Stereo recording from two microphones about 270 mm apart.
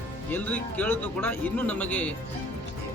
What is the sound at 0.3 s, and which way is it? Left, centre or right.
Speech, centre.